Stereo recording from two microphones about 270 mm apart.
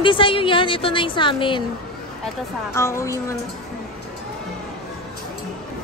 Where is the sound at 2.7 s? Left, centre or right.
Centre.